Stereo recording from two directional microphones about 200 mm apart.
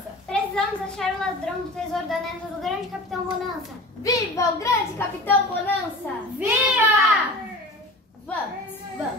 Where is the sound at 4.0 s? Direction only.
15° left (ahead or behind).